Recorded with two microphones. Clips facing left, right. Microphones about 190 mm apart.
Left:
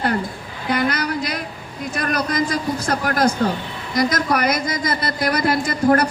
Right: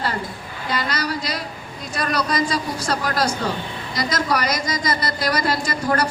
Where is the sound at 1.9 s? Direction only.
55° left (ahead or behind).